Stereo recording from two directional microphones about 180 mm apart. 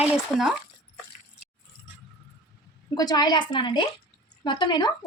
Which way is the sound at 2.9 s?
25° left (ahead or behind).